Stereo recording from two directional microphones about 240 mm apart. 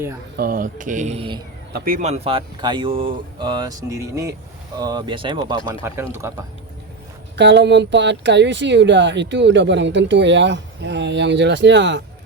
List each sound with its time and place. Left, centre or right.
0.3 s speech: right
1.7 s speech: right; by 6.3 s centre
7.3 s speech: right